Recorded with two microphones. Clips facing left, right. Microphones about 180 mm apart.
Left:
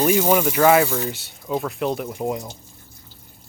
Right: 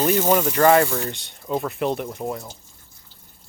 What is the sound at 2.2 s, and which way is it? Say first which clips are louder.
Speech: left 3 dB; 15° left (ahead or behind).